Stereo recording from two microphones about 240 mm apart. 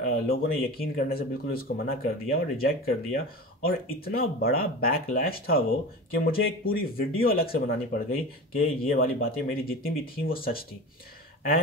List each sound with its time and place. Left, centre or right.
0.0 s speech: left